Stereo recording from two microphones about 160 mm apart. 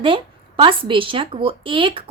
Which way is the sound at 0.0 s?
30° right (ahead or behind).